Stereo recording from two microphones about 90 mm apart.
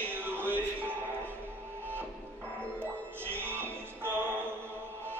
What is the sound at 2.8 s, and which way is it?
Music, 25° right (ahead or behind).